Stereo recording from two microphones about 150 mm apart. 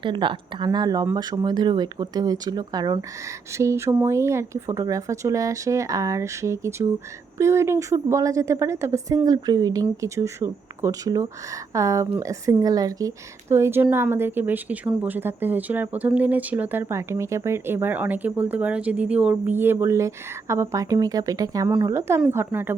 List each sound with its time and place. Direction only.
0.0 s a woman's voice: 35° right (ahead or behind); by 22.7 s 15° right (ahead or behind)